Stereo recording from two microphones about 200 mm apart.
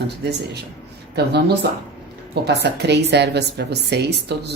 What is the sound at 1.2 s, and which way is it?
A woman's voice, 60° right (ahead or behind).